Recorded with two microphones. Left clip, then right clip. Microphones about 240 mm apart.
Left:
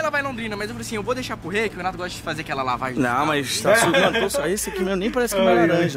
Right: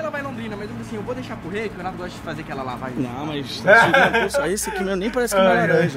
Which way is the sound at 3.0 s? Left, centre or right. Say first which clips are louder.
Left 11 dB; centre.